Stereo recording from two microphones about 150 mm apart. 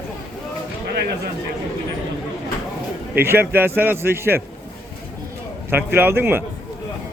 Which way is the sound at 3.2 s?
15° right (ahead or behind).